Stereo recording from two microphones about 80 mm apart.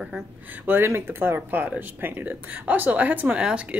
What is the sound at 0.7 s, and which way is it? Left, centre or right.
Speech, right.